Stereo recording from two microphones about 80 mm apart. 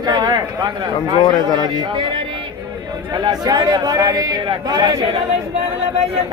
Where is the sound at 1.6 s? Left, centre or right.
Right.